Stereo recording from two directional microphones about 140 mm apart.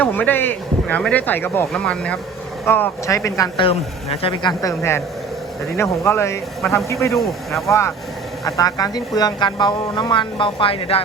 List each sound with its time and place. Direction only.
0.0 s speech: 15° left (ahead or behind)
3.6 s speech: 45° left (ahead or behind)
4.6 s speech: 20° left (ahead or behind)
8.4 s speech: 25° left (ahead or behind); by 11.0 s 40° left (ahead or behind)